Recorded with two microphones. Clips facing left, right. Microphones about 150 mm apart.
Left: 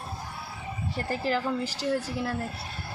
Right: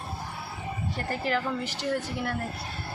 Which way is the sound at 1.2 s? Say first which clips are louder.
Left 1 dB; 35° left (ahead or behind).